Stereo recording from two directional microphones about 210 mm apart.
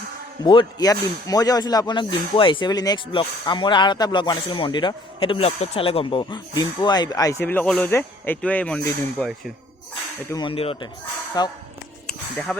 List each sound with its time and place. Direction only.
0.4 s speech: 20° left (ahead or behind); by 9.5 s 5° left (ahead or behind)
10.2 s speech: 20° left (ahead or behind)